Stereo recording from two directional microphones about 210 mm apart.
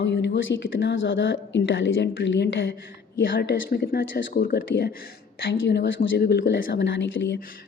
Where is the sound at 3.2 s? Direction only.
50° left (ahead or behind).